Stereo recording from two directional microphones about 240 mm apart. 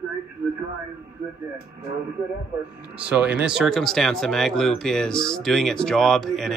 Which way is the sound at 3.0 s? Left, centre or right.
Centre.